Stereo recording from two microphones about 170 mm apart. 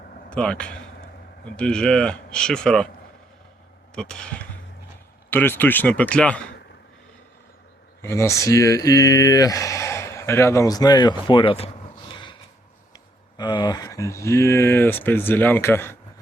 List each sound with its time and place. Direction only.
0.3 s speech: 5° left (ahead or behind)
3.9 s speech: 5° left (ahead or behind)
8.0 s speech: 15° left (ahead or behind)